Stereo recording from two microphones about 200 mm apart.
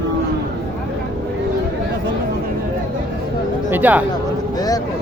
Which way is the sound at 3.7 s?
10° right (ahead or behind).